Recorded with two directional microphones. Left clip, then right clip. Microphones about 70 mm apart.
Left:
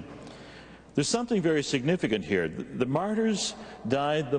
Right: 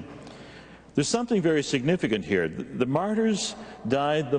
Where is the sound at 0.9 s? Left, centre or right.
Right.